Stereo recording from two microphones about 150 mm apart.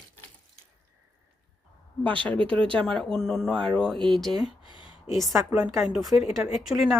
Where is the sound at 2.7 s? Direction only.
5° left (ahead or behind).